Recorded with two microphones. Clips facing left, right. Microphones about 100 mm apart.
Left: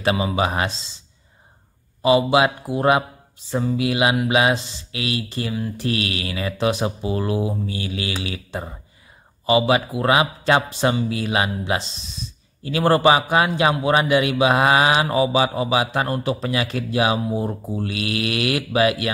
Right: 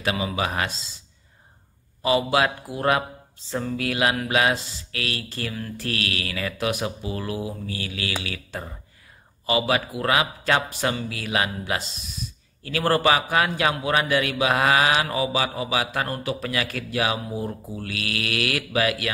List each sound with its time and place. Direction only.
0.0 s a man's voice: 30° left (ahead or behind)
2.0 s a man's voice: 20° left (ahead or behind)